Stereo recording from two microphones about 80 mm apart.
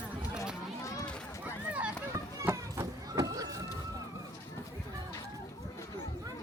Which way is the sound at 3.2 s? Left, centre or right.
Right.